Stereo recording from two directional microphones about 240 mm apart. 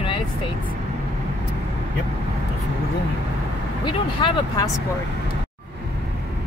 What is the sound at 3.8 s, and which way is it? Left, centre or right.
Speech, centre.